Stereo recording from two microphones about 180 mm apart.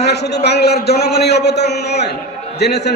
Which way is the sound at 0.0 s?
70° left (ahead or behind).